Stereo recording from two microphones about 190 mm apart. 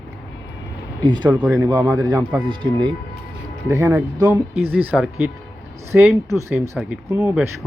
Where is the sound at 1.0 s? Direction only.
25° right (ahead or behind).